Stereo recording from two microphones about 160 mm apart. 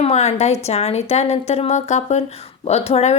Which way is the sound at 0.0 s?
40° left (ahead or behind).